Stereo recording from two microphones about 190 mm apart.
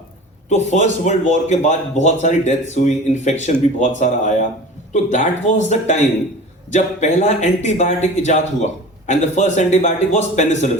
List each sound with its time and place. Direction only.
0.5 s speech: 40° left (ahead or behind)